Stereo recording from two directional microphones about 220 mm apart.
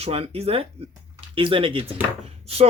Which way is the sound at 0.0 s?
25° right (ahead or behind).